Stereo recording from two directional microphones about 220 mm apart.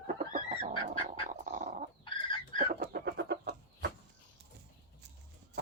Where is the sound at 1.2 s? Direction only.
35° right (ahead or behind).